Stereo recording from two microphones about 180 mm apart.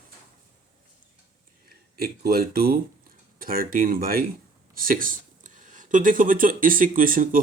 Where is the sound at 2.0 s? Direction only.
60° right (ahead or behind).